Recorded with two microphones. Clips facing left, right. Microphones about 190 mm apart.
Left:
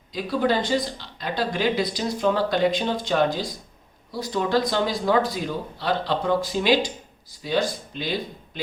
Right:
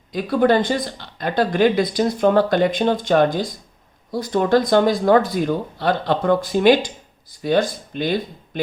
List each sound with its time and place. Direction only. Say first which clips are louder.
0.1 s speech: right 6 dB; 55° right (ahead or behind)